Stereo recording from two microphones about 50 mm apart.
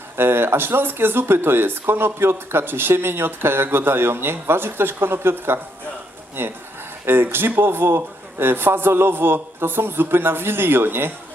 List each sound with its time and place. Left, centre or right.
0.2 s speech: right